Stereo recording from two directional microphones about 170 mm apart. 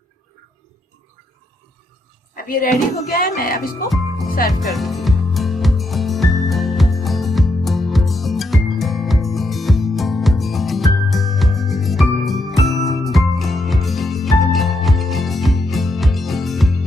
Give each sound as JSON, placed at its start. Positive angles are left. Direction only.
{"t": 2.3, "sound": "a sound", "side_deg": 60}
{"t": 3.1, "sound": "speech", "side_deg": 60}
{"t": 4.6, "sound": "music", "side_deg": 0}